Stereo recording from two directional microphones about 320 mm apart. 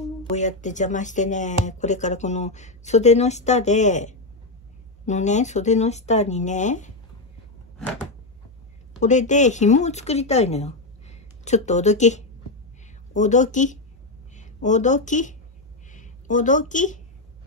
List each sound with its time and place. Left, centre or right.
0.2 s speech: left
9.0 s a woman's voice: left